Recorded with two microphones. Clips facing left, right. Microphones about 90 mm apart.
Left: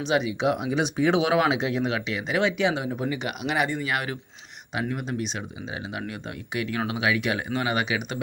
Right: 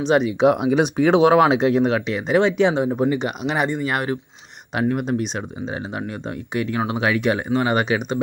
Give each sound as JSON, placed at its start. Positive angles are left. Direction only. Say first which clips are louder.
{"t": 0.0, "sound": "speech", "louder": "right 7 dB", "side_deg": -45}
{"t": 1.2, "sound": "speech", "louder": "right 8 dB", "side_deg": -45}
{"t": 3.8, "sound": "speech", "louder": "right 6 dB", "side_deg": -40}
{"t": 4.7, "sound": "speech", "louder": "right 8 dB", "side_deg": -50}
{"t": 6.0, "sound": "speech", "louder": "right 6 dB", "side_deg": -30}